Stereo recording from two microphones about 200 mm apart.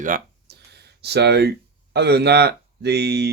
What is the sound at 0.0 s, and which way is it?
Speech, 50° right (ahead or behind).